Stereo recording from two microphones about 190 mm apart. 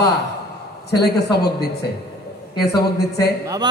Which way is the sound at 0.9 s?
60° left (ahead or behind).